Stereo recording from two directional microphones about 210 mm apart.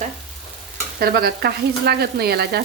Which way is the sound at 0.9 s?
45° right (ahead or behind).